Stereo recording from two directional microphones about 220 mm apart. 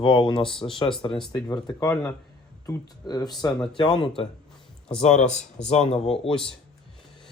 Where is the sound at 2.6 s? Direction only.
15° left (ahead or behind).